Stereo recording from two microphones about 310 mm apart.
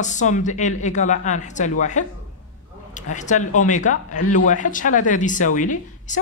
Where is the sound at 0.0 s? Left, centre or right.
Left.